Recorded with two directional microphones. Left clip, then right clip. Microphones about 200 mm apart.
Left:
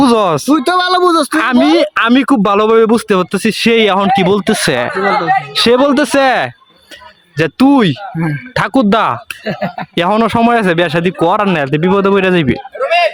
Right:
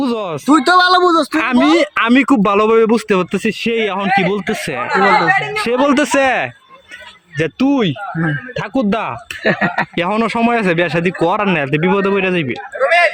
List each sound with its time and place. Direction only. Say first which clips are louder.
0.0 s a sound: left 9 dB; 30° left (ahead or behind)
0.4 s speech: right 1 dB; 15° left (ahead or behind)
1.0 s speech: left 2 dB; 50° left (ahead or behind)
1.4 s speech: left 3 dB; 15° left (ahead or behind)
3.5 s speech: left 11 dB; 30° left (ahead or behind)
5.8 s speech: left 3 dB; 15° left (ahead or behind); by 9.1 s 30° left (ahead or behind)
9.4 s speech: right 4 dB; 20° right (ahead or behind)
9.9 s speech: left 5 dB; 15° left (ahead or behind)